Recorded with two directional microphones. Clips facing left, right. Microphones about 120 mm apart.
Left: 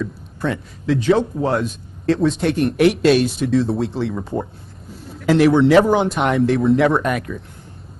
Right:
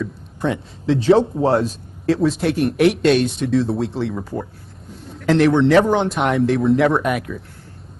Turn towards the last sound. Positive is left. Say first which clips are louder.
# even
turn(degrees=-5)  # may be behind; listen again after turning